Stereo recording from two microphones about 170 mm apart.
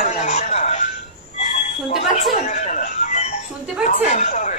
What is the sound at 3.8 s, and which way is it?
Speech, 40° left (ahead or behind).